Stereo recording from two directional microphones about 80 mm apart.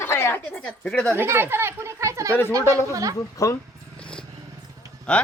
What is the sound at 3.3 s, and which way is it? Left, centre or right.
Speech, left.